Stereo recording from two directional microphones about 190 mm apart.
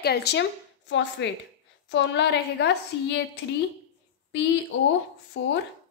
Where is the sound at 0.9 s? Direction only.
70° left (ahead or behind).